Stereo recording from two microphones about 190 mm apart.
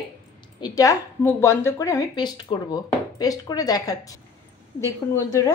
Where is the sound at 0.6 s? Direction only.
20° left (ahead or behind).